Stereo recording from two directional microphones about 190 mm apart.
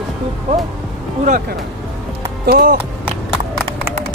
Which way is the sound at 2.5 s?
50° right (ahead or behind).